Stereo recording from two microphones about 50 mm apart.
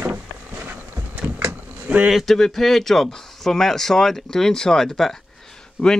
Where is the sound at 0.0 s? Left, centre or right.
Right.